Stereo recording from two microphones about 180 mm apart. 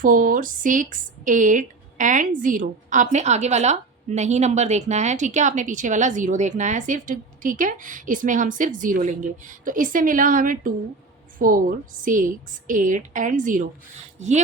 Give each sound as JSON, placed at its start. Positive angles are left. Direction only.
{"t": 0.0, "sound": "a woman's voice", "side_deg": -50}